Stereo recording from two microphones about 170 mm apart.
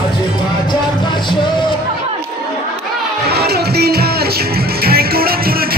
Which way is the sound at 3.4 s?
65° right (ahead or behind).